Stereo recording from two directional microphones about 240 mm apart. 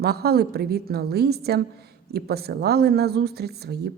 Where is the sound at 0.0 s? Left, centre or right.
Right.